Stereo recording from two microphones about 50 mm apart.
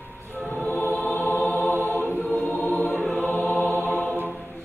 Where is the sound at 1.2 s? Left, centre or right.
Left.